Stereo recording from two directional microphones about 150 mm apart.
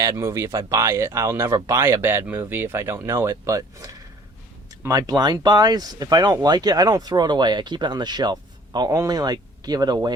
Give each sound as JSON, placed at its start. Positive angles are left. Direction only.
{"t": 0.0, "sound": "speech", "side_deg": -20}